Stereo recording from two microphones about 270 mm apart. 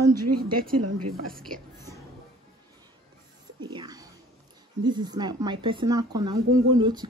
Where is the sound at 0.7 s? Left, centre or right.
Right.